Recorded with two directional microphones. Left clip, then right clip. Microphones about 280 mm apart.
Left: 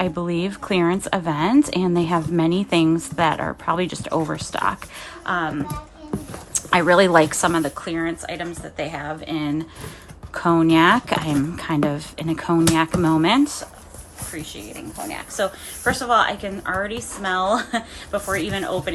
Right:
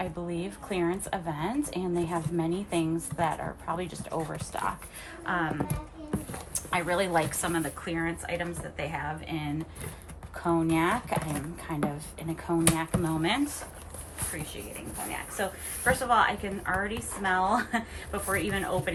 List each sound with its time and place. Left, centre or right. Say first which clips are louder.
0.0 s speech: left 11 dB; left
5.2 s speech: left 7 dB; centre
6.5 s a woman's voice: left 13 dB; left
10.3 s speech: left 11 dB; left
15.4 s a woman's voice: left 11 dB; centre